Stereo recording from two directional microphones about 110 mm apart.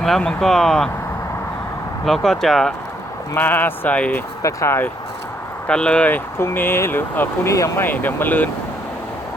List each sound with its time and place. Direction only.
0.0 s speech: 5° left (ahead or behind)
2.0 s speech: centre (ahead or behind)
3.3 s speech: 20° left (ahead or behind)
4.4 s speech: 25° left (ahead or behind)
5.6 s speech: 10° left (ahead or behind)